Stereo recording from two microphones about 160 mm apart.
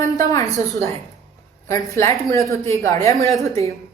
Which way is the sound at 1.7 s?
20° left (ahead or behind).